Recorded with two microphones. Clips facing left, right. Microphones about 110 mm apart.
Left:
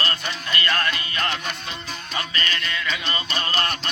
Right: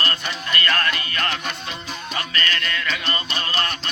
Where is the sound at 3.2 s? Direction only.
30° left (ahead or behind).